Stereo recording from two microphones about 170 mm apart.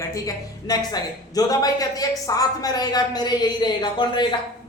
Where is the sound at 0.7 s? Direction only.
25° left (ahead or behind).